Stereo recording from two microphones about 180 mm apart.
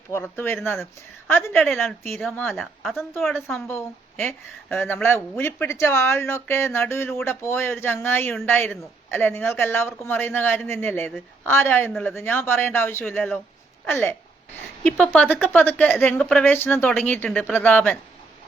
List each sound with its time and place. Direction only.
0.1 s a woman's voice: 15° left (ahead or behind)
3.7 s a woman's voice: 10° left (ahead or behind)